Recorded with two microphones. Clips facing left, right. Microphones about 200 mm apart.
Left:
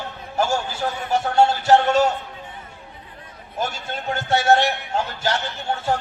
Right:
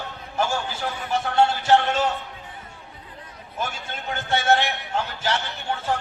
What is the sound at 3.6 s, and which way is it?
A man's voice, 40° left (ahead or behind).